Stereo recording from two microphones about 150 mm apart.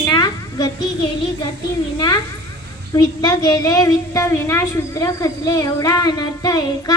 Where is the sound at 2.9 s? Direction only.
25° left (ahead or behind).